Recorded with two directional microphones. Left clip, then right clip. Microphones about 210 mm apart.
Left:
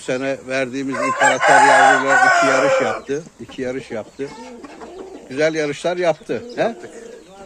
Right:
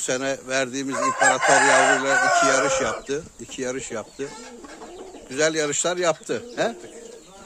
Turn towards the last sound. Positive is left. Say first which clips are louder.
# left 4 dB
turn(degrees=-10)  # may be behind; listen again after turning